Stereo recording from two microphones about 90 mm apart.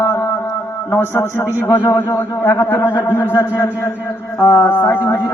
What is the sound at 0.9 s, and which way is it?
A man's voice, 25° left (ahead or behind).